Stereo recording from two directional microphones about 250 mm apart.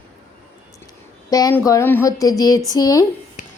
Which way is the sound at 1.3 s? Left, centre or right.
Centre.